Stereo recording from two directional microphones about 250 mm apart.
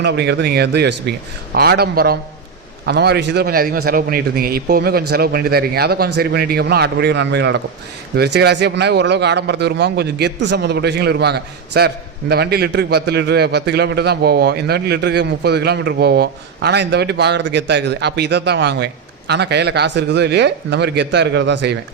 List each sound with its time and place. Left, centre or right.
0.0 s a man's voice: right